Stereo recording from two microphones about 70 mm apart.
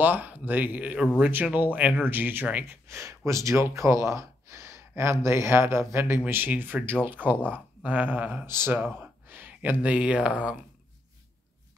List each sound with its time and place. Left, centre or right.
0.0 s speech: right
2.7 s speech: right
8.5 s speech: right; by 10.6 s centre